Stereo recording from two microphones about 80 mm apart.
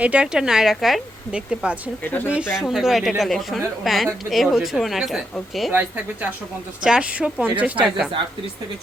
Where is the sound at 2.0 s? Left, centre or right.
Left.